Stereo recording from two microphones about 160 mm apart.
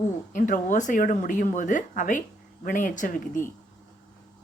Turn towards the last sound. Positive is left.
turn(degrees=55)  # may be behind; listen again after turning